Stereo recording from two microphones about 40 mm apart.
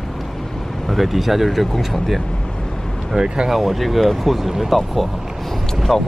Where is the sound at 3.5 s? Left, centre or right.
Centre.